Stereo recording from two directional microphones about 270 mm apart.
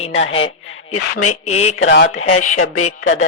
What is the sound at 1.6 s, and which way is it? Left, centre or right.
Speech, left.